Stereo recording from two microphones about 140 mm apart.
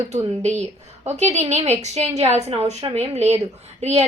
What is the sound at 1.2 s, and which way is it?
A woman's voice, 55° right (ahead or behind).